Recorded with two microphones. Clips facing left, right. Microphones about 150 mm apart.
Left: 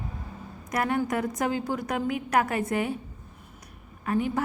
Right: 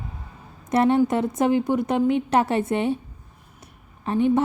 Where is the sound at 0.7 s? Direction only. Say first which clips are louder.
Right 8 dB; 25° right (ahead or behind).